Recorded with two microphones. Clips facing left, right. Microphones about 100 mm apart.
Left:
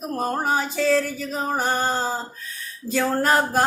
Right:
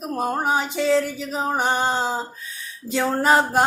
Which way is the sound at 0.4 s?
15° right (ahead or behind).